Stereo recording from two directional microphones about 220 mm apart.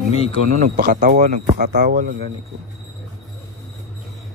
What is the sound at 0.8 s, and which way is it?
Speech, 40° right (ahead or behind).